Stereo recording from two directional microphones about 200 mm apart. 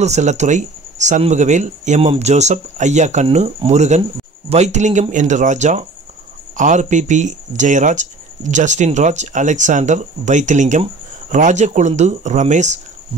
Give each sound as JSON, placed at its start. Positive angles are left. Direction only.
{"t": 0.0, "sound": "speech", "side_deg": -35}